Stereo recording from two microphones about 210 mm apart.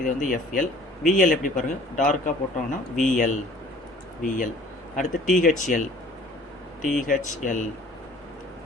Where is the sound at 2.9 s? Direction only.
35° left (ahead or behind).